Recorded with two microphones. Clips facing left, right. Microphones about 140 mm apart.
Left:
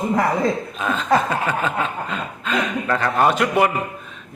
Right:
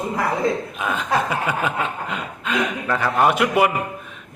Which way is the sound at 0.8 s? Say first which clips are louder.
Left 4 dB; 10° right (ahead or behind).